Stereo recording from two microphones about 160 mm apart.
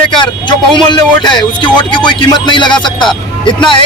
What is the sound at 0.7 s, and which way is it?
Speech, 30° left (ahead or behind).